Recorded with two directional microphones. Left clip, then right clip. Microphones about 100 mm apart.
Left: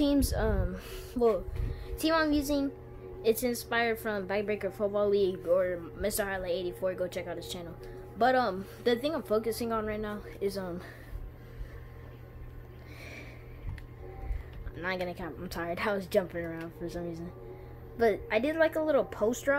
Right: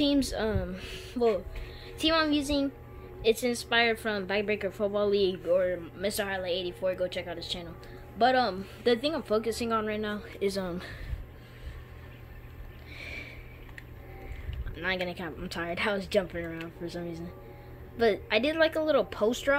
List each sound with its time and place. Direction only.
0.0 s speech: 10° right (ahead or behind)
1.2 s speech: centre (ahead or behind)
2.0 s a woman's voice: 15° right (ahead or behind)
13.0 s a sound: 5° right (ahead or behind)
14.8 s a woman's voice: 15° right (ahead or behind)
18.1 s a woman's voice: 20° right (ahead or behind)